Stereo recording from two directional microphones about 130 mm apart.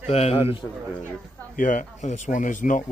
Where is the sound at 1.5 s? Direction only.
90° left.